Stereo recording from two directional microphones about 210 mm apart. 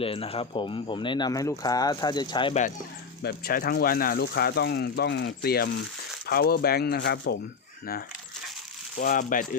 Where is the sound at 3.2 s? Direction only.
45° left (ahead or behind).